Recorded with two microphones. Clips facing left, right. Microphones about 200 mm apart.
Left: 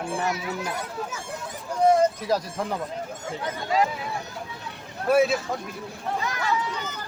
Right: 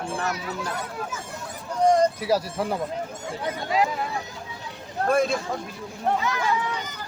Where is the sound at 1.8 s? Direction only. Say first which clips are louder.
Even; 10° left (ahead or behind).